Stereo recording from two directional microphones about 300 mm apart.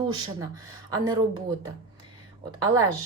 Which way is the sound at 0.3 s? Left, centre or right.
Centre.